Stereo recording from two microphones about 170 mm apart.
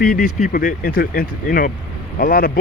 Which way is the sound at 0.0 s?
55° left (ahead or behind).